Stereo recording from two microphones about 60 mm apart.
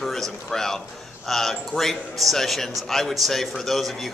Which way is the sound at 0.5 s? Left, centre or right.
Centre.